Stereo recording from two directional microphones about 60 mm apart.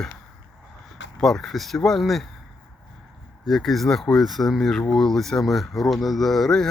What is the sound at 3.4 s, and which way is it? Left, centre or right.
Speech, centre.